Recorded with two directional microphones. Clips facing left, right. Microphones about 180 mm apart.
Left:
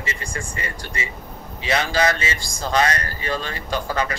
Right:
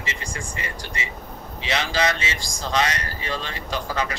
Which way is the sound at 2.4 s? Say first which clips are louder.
Left 3 dB; 55° left (ahead or behind).